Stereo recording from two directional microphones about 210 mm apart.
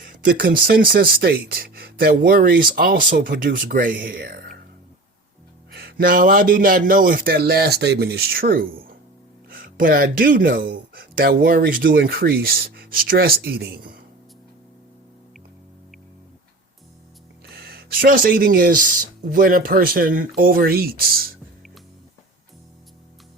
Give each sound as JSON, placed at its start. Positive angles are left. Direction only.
{"t": 0.0, "sound": "speech", "side_deg": -45}
{"t": 5.7, "sound": "speech", "side_deg": -45}
{"t": 17.4, "sound": "speech", "side_deg": -50}